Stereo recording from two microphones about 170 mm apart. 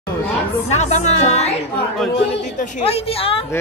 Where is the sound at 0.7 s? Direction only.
40° left (ahead or behind).